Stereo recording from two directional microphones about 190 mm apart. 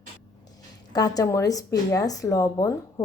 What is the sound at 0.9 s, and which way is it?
Speech, 20° left (ahead or behind).